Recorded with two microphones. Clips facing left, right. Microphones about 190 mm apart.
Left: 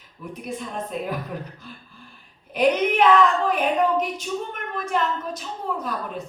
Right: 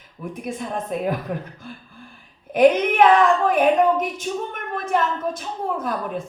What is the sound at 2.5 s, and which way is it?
Speech, 50° right (ahead or behind).